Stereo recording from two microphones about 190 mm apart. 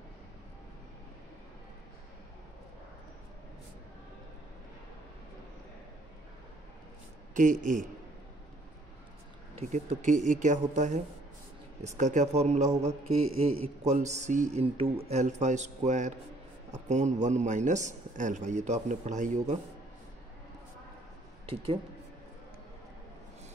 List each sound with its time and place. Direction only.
7.3 s speech: 40° right (ahead or behind)
9.6 s speech: 35° right (ahead or behind)